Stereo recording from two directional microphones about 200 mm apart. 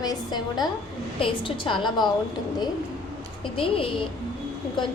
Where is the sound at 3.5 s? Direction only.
25° left (ahead or behind).